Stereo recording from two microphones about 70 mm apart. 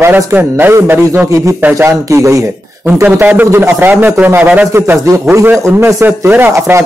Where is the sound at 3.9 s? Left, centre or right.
Right.